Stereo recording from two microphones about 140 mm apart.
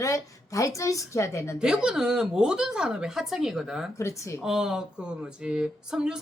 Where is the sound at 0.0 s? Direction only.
25° left (ahead or behind).